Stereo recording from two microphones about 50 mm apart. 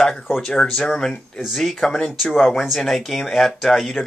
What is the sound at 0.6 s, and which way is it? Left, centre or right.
Speech, centre.